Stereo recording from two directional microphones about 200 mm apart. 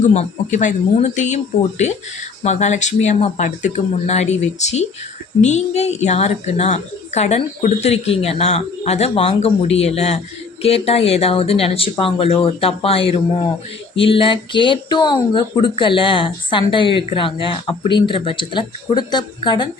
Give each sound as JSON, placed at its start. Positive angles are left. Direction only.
{"t": 0.1, "sound": "a woman's voice", "side_deg": 35}
{"t": 2.4, "sound": "a woman's voice", "side_deg": 35}